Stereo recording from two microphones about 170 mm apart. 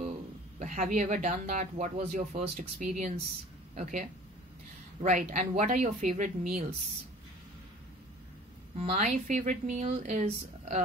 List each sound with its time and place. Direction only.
0.6 s speech: 45° right (ahead or behind)
8.7 s speech: 40° right (ahead or behind)